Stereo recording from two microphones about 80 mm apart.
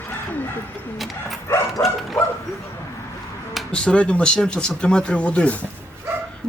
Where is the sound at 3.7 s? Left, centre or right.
Centre.